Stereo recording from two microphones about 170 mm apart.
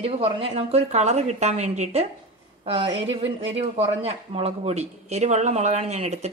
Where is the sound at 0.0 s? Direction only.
35° right (ahead or behind).